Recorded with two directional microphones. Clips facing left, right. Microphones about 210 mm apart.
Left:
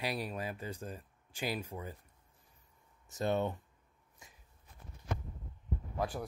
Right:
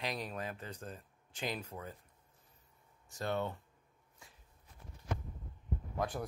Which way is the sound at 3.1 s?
20° left (ahead or behind).